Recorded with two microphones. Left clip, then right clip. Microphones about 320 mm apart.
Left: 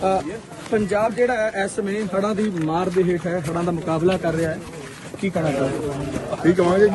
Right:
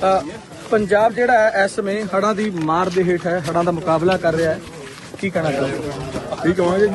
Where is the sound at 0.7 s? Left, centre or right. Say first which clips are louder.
Right 5 dB; right.